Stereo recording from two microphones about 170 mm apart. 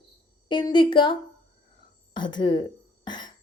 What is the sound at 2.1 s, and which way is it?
Speech, 25° left (ahead or behind).